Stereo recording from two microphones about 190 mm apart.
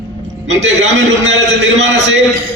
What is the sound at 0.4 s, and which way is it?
A man's voice, 75° right (ahead or behind).